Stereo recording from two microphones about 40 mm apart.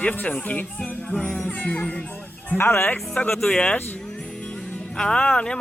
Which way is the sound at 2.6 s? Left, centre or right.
Left.